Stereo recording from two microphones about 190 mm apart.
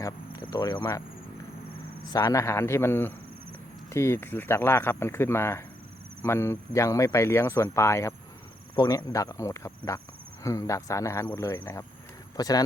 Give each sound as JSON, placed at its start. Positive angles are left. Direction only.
{"t": 0.0, "sound": "speech", "side_deg": 20}
{"t": 2.1, "sound": "speech", "side_deg": 20}